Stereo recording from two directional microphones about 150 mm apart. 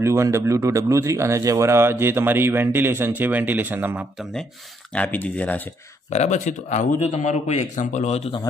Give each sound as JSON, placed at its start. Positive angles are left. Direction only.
{"t": 0.0, "sound": "speech", "side_deg": -20}
{"t": 4.9, "sound": "speech", "side_deg": 10}
{"t": 6.0, "sound": "a man's voice", "side_deg": 50}